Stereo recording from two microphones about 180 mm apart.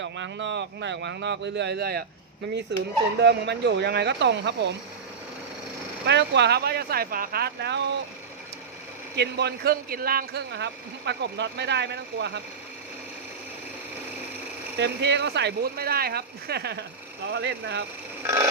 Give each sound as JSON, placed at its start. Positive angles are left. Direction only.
{"t": 0.0, "sound": "speech", "side_deg": -90}
{"t": 6.1, "sound": "speech", "side_deg": -75}
{"t": 9.1, "sound": "speech", "side_deg": -65}
{"t": 14.8, "sound": "speech", "side_deg": -70}